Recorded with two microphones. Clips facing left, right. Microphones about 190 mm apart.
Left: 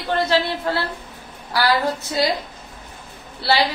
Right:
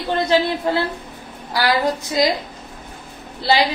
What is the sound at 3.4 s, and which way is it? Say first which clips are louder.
Speech: right 2 dB; 15° right (ahead or behind).